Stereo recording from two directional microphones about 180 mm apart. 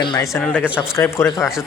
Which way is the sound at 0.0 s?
25° left (ahead or behind).